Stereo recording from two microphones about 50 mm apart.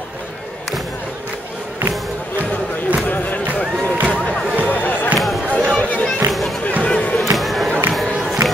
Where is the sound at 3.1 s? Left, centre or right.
Left.